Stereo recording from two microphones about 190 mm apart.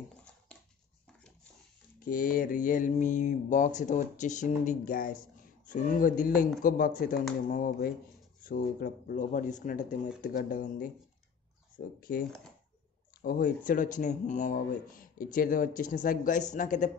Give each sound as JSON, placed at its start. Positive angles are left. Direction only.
{"t": 2.0, "sound": "mantra", "side_deg": 45}
{"t": 5.7, "sound": "speech", "side_deg": 45}
{"t": 11.8, "sound": "speech", "side_deg": 65}
{"t": 13.2, "sound": "speech", "side_deg": 50}